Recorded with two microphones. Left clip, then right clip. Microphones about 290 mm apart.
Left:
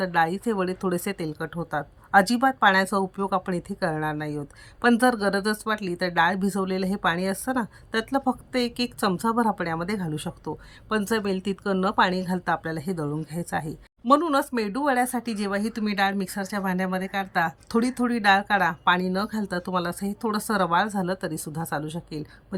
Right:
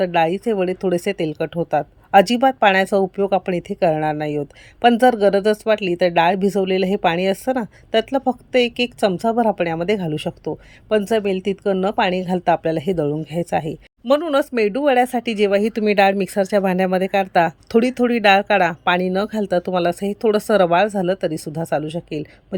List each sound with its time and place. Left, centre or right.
0.0 s speech: centre
0.5 s speech: left
0.8 s speech: centre